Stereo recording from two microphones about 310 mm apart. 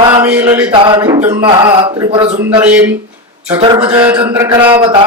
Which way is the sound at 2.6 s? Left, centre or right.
Centre.